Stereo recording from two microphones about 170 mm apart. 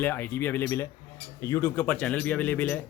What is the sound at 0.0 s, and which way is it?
Speech, 10° left (ahead or behind).